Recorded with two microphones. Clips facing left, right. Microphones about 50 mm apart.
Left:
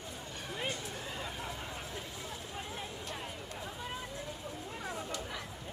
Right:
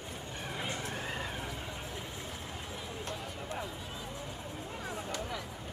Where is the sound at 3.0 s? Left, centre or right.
Right.